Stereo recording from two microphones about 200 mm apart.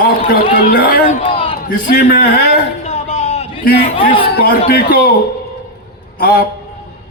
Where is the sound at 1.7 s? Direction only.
45° left (ahead or behind).